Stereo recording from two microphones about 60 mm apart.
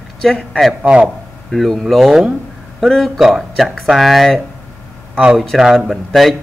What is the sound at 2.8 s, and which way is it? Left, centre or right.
Speech, centre.